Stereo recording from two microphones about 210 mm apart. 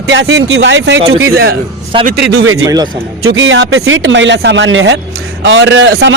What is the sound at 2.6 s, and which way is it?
Speech, 20° right (ahead or behind).